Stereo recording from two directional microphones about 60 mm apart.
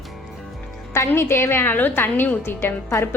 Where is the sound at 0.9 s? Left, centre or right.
Left.